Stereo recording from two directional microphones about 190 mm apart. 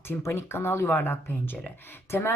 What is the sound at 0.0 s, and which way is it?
Speech, 10° left (ahead or behind).